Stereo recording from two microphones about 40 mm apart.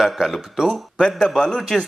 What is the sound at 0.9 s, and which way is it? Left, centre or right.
Speech, left.